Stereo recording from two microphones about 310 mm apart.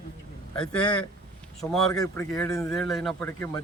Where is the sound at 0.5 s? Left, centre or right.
Centre.